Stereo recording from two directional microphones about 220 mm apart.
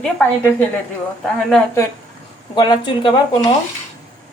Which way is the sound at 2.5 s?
20° left (ahead or behind).